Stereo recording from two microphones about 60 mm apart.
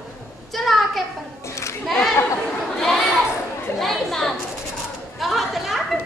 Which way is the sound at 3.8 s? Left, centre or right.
Centre.